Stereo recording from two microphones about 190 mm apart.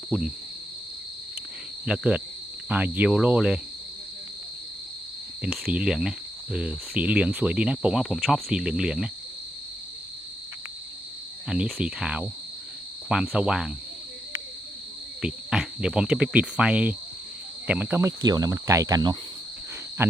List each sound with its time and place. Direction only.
1.8 s speech: 5° right (ahead or behind)
5.7 s speech: 5° right (ahead or behind)
11.4 s speech: 5° right (ahead or behind)
15.2 s speech: 5° right (ahead or behind)